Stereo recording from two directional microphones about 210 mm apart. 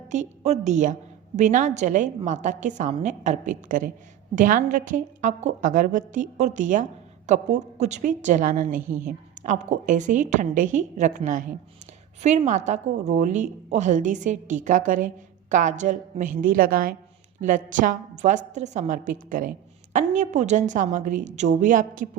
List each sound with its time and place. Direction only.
0.1 s a woman's voice: 35° right (ahead or behind)